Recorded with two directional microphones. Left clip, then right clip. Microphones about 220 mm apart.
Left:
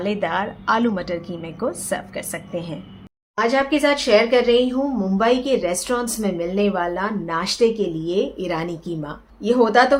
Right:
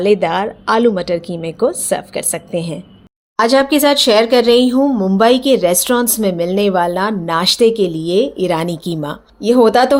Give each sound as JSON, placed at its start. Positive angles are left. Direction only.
{"t": 0.0, "sound": "a woman's voice", "side_deg": -30}
{"t": 3.3, "sound": "speech", "side_deg": -50}